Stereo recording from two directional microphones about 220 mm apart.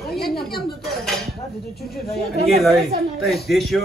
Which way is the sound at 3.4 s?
Centre (ahead or behind).